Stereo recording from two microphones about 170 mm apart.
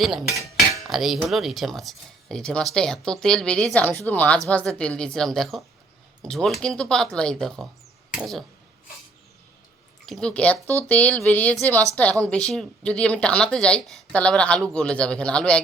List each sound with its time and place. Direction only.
0.0 s speech: centre (ahead or behind)
10.1 s speech: 5° left (ahead or behind)